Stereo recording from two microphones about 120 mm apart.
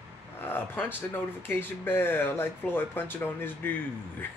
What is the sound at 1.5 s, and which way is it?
Speech, 20° left (ahead or behind).